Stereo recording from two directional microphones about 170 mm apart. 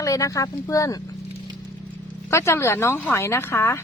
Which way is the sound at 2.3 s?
15° left (ahead or behind).